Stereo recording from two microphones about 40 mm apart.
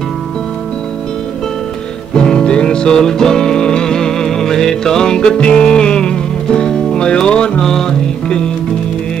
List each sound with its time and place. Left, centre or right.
2.1 s music: centre
7.6 s music: centre